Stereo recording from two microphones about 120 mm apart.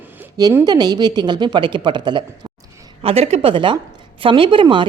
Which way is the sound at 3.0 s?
60° right (ahead or behind).